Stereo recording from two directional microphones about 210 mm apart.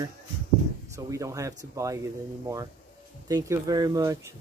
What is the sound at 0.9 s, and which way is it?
Speech, 15° right (ahead or behind).